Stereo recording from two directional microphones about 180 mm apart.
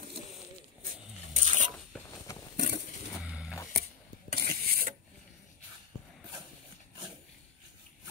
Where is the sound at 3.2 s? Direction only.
5° right (ahead or behind).